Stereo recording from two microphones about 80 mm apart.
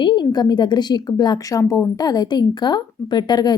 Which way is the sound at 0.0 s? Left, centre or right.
Left.